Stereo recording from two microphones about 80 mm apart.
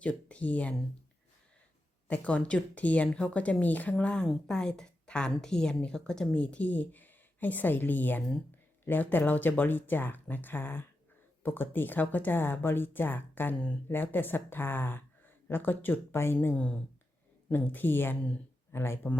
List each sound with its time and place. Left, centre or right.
0.0 s a woman's voice: centre
2.0 s a woman's voice: centre
3.9 s a woman's voice: centre; by 19.1 s left